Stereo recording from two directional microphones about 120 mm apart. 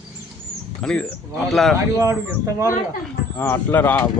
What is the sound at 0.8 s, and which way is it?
Speech, 5° left (ahead or behind).